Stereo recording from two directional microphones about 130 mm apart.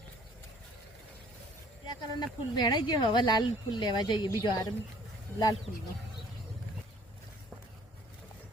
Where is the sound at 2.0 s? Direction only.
35° left (ahead or behind).